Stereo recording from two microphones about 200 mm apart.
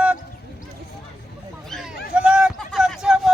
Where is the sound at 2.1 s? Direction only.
5° right (ahead or behind).